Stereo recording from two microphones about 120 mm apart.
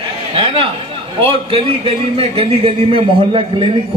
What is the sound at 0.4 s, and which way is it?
A man's voice, 50° right (ahead or behind).